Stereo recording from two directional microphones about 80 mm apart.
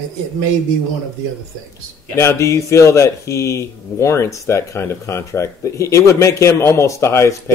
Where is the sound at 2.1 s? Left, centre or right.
Left.